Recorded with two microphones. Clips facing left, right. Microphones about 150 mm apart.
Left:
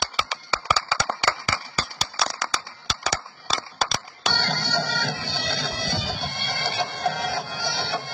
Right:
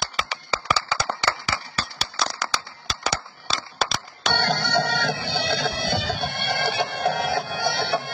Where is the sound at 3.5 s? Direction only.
Centre (ahead or behind).